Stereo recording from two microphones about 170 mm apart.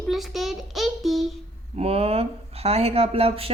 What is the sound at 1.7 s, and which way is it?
Speech, 35° right (ahead or behind).